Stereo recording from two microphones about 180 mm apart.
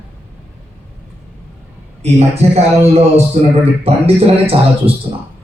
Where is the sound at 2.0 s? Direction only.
35° right (ahead or behind).